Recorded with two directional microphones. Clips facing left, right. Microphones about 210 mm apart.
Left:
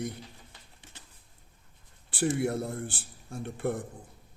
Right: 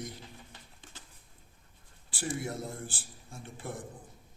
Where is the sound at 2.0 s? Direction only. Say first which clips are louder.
Left 9 dB; 65° left (ahead or behind).